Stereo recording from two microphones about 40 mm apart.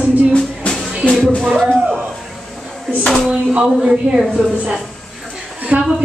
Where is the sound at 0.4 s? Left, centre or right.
Centre.